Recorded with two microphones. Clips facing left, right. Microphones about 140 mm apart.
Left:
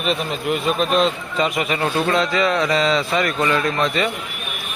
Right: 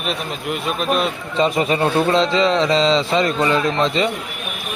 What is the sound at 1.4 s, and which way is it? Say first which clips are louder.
A man's voice: right 4 dB; 30° right (ahead or behind).